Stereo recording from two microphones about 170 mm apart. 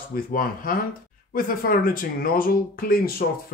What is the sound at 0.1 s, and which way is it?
A man's voice, 55° left (ahead or behind).